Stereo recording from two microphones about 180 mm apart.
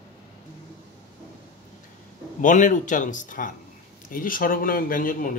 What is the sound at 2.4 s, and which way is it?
Speech, 45° left (ahead or behind).